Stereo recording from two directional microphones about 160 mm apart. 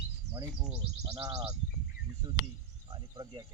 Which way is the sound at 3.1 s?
25° right (ahead or behind).